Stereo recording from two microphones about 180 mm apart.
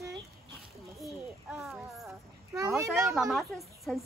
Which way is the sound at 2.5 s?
20° right (ahead or behind).